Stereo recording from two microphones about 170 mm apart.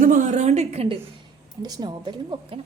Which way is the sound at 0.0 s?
50° right (ahead or behind).